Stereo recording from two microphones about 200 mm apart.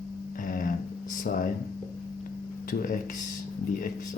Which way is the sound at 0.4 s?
45° left (ahead or behind).